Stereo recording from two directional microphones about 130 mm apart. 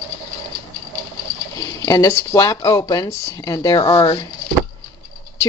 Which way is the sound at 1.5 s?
25° left (ahead or behind).